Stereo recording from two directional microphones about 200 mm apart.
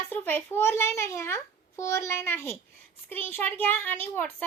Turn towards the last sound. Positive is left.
turn(degrees=10)  # may be behind; listen again after turning